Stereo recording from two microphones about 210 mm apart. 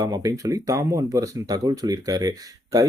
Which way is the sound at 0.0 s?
15° right (ahead or behind).